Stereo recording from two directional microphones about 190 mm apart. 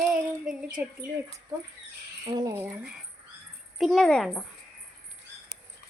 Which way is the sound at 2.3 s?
15° right (ahead or behind).